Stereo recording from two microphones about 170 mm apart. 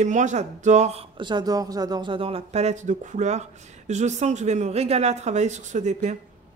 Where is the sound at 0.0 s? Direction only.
45° right (ahead or behind).